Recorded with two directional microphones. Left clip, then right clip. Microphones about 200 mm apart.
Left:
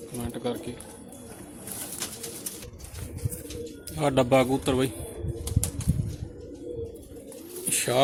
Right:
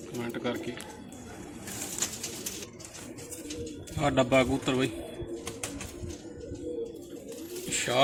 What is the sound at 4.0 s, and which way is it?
Speech, 55° left (ahead or behind).